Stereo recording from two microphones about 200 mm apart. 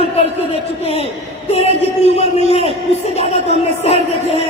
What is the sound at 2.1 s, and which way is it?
Speech, 30° left (ahead or behind).